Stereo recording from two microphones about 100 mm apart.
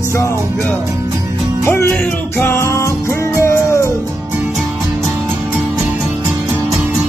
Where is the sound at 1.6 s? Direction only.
25° left (ahead or behind).